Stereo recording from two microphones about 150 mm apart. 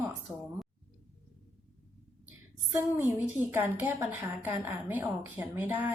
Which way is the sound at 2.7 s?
15° right (ahead or behind).